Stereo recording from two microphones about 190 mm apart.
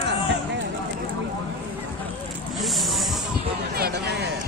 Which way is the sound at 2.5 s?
Centre (ahead or behind).